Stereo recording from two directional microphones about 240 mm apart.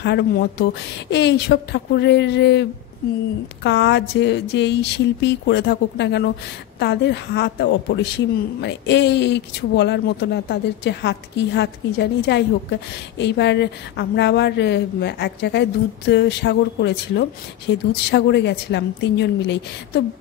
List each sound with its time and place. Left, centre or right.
0.0 s a woman's voice: left